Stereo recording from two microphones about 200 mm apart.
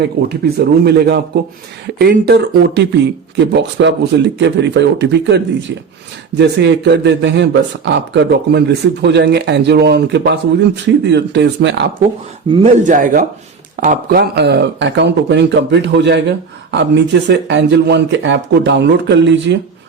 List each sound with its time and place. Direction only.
0.0 s speech: 50° right (ahead or behind)
12.5 s speech: 30° right (ahead or behind); by 19.5 s 60° right (ahead or behind)